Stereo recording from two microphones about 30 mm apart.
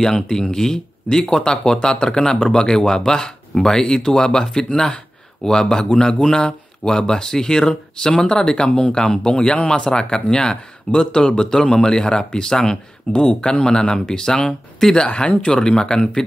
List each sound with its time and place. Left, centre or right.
0.3 s speech: centre
14.8 s speech: centre
15.1 s speech: left